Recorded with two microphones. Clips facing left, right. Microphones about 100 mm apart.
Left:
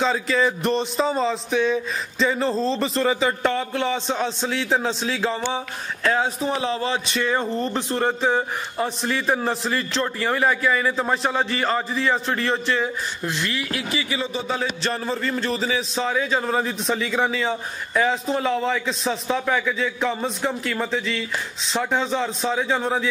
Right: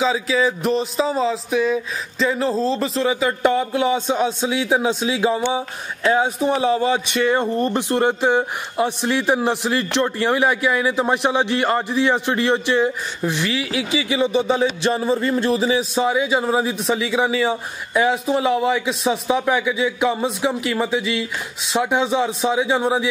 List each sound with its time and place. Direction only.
0.0 s music: centre (ahead or behind)
6.0 s a man's voice: 10° right (ahead or behind)